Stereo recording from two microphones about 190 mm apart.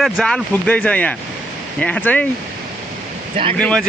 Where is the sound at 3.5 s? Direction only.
5° left (ahead or behind).